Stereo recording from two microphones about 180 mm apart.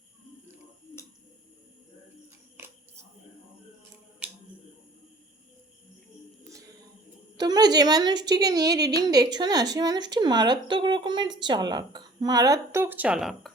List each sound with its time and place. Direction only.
7.3 s a woman's voice: 20° right (ahead or behind); by 13.5 s centre (ahead or behind)